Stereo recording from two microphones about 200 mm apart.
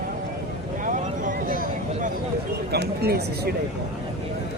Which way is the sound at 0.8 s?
40° right (ahead or behind).